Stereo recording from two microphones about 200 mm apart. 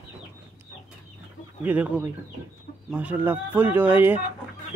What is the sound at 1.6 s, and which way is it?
Speech, 5° right (ahead or behind).